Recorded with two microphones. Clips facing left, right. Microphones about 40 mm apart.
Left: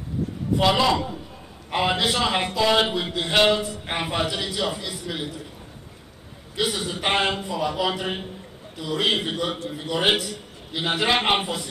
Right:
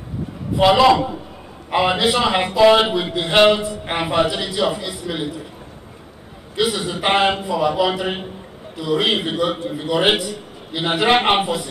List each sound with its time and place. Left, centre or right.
0.6 s a man's voice: centre
2.9 s a man's voice: centre
3.3 s a man's voice: right
3.6 s a man's voice: centre
6.5 s a man's voice: centre